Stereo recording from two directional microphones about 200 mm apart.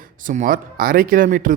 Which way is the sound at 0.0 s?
40° right (ahead or behind).